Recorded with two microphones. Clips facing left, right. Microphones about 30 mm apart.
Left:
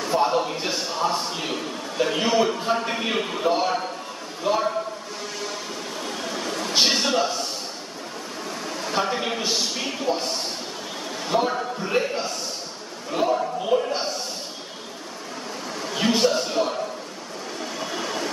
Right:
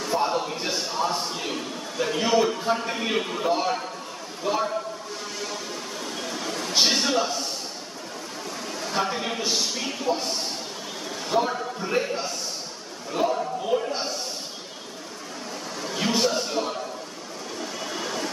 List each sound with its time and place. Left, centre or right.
0.0 s a man's voice: centre
6.0 s a sound: centre
8.8 s a man's voice: centre
11.2 s a man's voice: centre
13.3 s a man's voice: centre
15.8 s a man's voice: centre
17.6 s a sound: centre